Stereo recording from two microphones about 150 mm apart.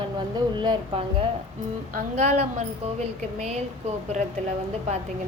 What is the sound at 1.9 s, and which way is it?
A woman's voice, 55° right (ahead or behind).